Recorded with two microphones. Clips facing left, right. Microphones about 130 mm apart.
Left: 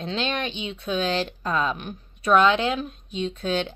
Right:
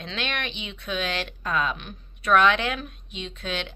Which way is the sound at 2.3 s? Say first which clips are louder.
Left 2 dB; 25° left (ahead or behind).